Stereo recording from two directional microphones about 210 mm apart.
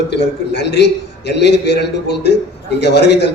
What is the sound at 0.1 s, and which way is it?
A man's voice, 55° left (ahead or behind).